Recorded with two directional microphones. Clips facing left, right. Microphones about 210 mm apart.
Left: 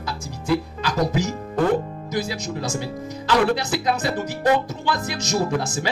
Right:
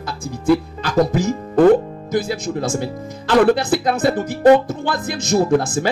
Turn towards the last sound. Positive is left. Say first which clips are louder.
# right 7 dB
turn(degrees=-55)  # may be behind; listen again after turning